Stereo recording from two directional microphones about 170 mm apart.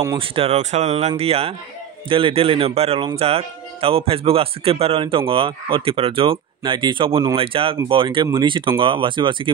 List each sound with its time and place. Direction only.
0.2 s speech: 35° right (ahead or behind)